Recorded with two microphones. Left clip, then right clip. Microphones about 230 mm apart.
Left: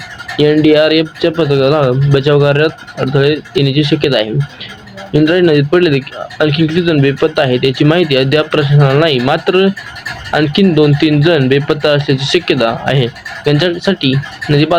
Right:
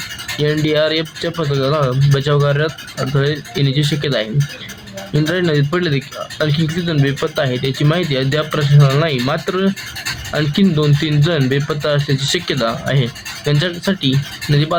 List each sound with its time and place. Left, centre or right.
0.3 s speech: centre